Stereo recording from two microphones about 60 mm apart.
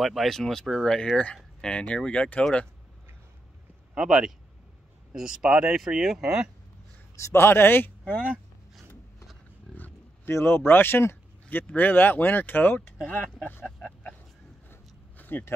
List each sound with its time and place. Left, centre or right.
0.0 s speech: centre
3.9 s speech: centre
7.2 s speech: left
9.8 s roaring cats: left
10.3 s speech: left
14.7 s a sound: left